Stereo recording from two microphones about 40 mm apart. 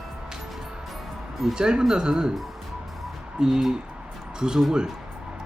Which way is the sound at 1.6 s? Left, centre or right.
Centre.